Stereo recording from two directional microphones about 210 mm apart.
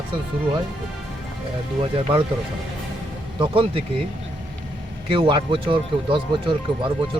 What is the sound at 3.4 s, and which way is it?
Speech, 25° right (ahead or behind).